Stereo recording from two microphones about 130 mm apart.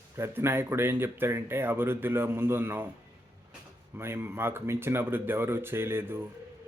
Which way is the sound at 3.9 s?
20° right (ahead or behind).